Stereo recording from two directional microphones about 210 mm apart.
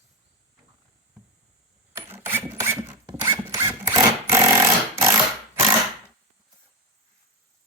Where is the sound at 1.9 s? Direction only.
10° right (ahead or behind).